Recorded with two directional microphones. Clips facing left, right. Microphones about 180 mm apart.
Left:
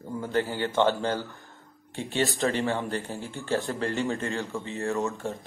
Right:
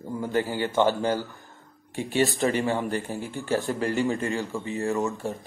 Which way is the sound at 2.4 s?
15° right (ahead or behind).